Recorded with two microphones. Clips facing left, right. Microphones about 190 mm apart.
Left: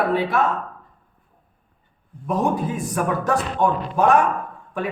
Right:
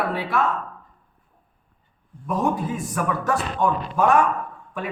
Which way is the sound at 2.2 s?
15° left (ahead or behind).